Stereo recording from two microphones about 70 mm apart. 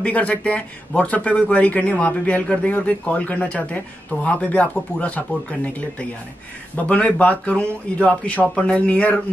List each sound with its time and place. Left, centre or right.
0.0 s speech: left